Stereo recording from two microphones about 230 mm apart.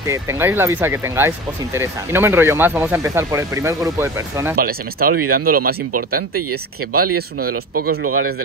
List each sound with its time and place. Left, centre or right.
0.0 s speech: centre
4.6 s speech: right
6.9 s speech: right
7.8 s speech: right